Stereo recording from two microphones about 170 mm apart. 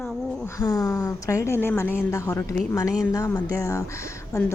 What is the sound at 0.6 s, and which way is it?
A woman's voice, 20° left (ahead or behind).